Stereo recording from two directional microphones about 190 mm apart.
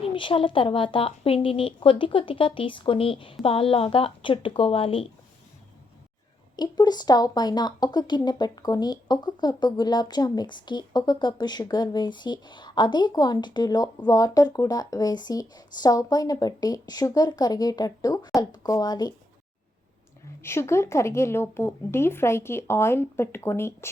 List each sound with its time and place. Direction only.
0.0 s speech: 25° left (ahead or behind)
6.6 s speech: 20° left (ahead or behind)
20.4 s speech: 15° left (ahead or behind)